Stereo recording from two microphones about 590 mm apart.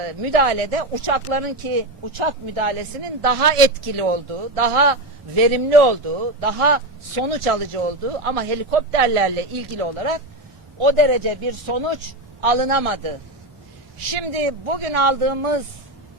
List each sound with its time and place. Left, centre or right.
0.0 s a man's voice: right
3.9 s a man's voice: right
14.1 s a man's voice: right